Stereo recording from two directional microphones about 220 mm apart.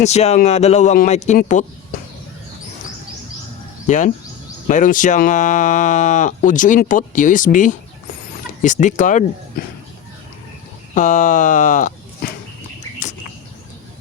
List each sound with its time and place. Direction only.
0.0 s speech: 30° left (ahead or behind)
3.8 s speech: 35° left (ahead or behind)
10.9 s speech: 35° left (ahead or behind)